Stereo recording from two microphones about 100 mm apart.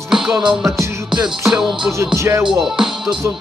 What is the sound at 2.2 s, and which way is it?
Music, 30° right (ahead or behind).